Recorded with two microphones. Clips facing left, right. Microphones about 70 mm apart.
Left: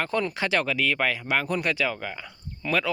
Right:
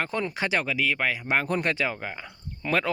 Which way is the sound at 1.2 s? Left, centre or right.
Right.